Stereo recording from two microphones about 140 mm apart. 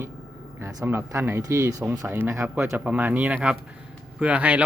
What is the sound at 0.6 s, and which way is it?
Speech, 25° right (ahead or behind).